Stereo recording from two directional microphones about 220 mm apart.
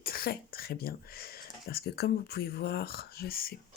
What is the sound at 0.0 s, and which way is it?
Speech, 45° left (ahead or behind).